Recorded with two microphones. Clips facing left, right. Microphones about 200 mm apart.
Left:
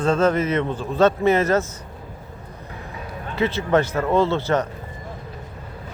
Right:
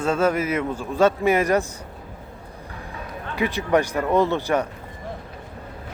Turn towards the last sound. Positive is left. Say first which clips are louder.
# left 1 dB
turn(degrees=-15)  # may be behind; listen again after turning